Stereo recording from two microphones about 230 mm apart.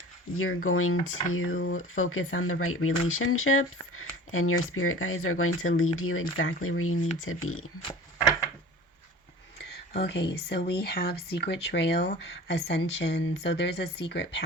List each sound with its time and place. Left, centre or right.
0.3 s speech: left
10.0 s speech: left